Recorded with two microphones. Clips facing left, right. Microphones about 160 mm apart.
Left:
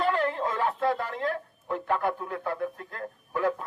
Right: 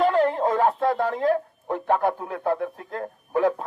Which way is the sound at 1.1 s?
40° right (ahead or behind).